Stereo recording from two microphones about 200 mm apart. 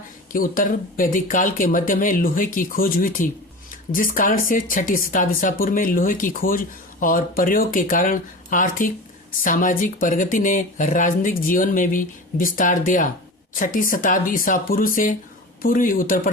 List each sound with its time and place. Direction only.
0.3 s speech: 45° left (ahead or behind)